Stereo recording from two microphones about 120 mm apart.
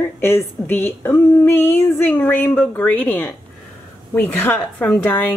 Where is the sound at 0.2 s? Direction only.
20° left (ahead or behind).